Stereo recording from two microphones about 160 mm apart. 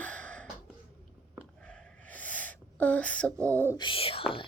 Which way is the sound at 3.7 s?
30° left (ahead or behind).